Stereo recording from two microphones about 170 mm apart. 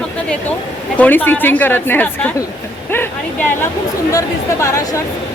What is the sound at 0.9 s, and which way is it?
Speech, 10° left (ahead or behind).